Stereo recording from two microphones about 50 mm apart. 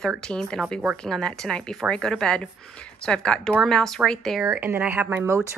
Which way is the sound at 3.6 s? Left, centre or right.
Centre.